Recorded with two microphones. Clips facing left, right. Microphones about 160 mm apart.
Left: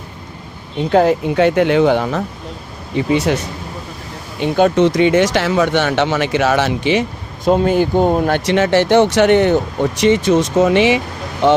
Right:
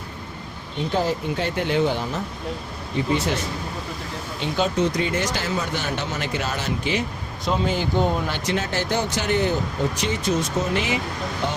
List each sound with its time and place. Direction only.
0.9 s speech: 70° left (ahead or behind)
3.1 s speech: 90° left
4.4 s speech: 60° left (ahead or behind); by 7.0 s 80° left
7.4 s speech: 55° left (ahead or behind)
8.4 s speech: 85° left
10.0 s speech: 80° left